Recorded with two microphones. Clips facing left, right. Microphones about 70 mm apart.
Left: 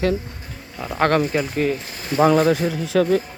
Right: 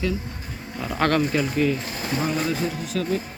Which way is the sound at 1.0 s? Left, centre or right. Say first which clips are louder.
Left 3 dB; left.